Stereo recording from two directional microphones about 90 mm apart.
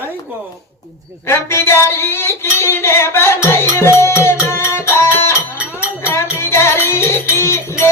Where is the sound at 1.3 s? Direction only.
30° left (ahead or behind).